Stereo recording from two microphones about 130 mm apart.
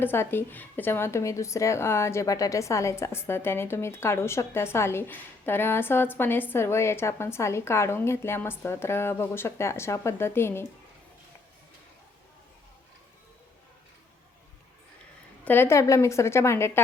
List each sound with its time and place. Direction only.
0.0 s a woman's voice: 15° left (ahead or behind)
15.4 s a woman's voice: 15° left (ahead or behind)